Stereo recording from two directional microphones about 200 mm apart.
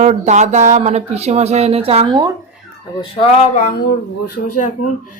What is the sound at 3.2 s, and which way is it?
Speech, 40° left (ahead or behind).